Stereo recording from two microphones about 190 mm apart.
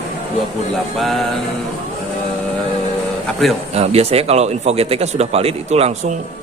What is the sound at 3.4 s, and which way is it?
Speech, centre (ahead or behind).